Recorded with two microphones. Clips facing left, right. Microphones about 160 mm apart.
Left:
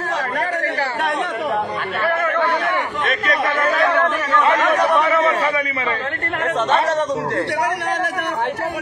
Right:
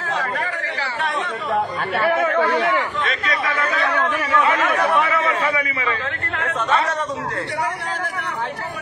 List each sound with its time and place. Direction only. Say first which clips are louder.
3.3 s chatter: left 6 dB; 50° left (ahead or behind)